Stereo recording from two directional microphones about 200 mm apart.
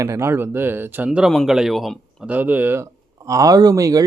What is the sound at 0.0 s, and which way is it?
Speech, 15° right (ahead or behind).